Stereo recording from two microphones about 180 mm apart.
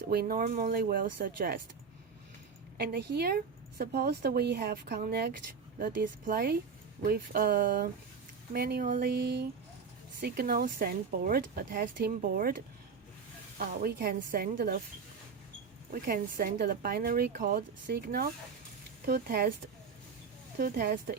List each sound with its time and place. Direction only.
0.1 s speech: 55° right (ahead or behind)
2.7 s speech: 65° right (ahead or behind)
15.9 s speech: 55° right (ahead or behind)
20.6 s speech: 55° right (ahead or behind)